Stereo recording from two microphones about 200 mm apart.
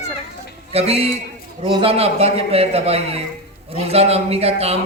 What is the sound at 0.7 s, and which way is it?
A man's voice, 30° right (ahead or behind).